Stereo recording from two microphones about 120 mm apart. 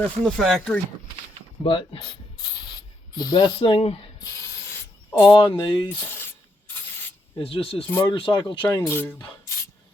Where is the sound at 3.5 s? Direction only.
50° left (ahead or behind).